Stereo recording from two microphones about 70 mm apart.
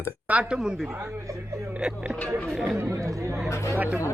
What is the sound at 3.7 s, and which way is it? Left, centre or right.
Speech, right.